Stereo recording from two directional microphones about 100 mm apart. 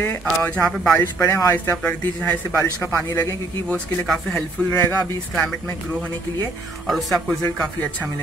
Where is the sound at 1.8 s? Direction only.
15° left (ahead or behind).